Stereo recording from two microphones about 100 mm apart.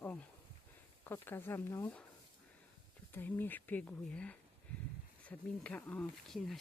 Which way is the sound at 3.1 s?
20° left (ahead or behind).